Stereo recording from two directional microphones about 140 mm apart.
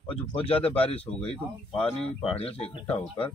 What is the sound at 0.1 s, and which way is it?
Speech, 40° left (ahead or behind).